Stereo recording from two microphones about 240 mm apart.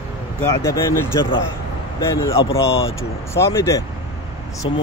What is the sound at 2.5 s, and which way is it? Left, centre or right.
Speech, centre.